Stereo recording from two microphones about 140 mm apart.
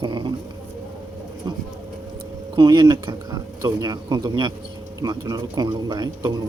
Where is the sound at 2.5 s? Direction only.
30° right (ahead or behind).